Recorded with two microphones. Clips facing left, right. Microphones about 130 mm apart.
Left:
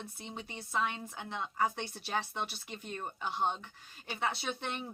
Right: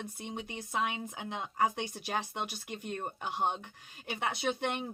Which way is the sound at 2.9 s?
50° right (ahead or behind).